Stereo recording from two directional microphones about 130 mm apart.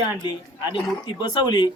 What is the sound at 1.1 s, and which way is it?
Speech, 35° left (ahead or behind).